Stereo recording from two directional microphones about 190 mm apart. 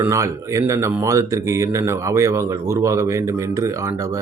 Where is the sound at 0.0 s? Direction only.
15° right (ahead or behind).